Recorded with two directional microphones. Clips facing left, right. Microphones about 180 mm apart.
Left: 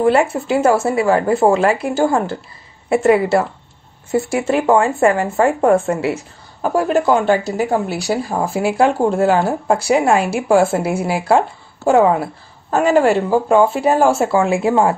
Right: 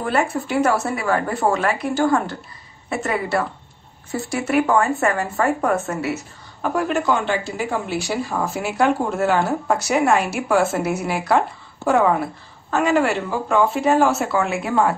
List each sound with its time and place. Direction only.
0.0 s speech: 25° left (ahead or behind)